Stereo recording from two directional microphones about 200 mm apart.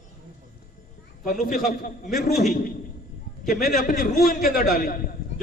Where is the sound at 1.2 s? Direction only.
45° left (ahead or behind).